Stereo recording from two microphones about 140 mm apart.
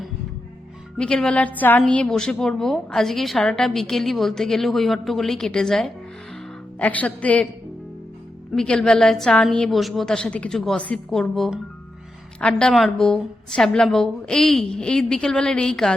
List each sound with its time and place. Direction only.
0.9 s a woman's voice: 5° left (ahead or behind)
8.5 s a woman's voice: 5° left (ahead or behind)